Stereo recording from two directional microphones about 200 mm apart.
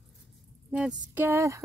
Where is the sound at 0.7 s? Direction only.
5° right (ahead or behind).